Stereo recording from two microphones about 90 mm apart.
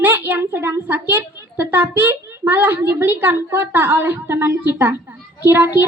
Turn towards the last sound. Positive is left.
turn(degrees=-25)  # may be behind; listen again after turning